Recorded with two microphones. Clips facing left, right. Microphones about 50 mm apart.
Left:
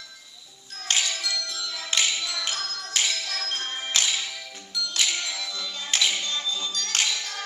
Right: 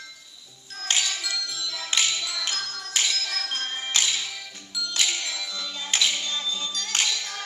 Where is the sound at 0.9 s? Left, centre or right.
Centre.